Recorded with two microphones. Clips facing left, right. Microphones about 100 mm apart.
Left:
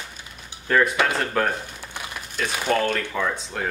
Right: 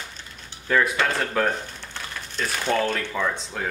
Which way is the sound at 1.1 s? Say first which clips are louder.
Even; 5° left (ahead or behind).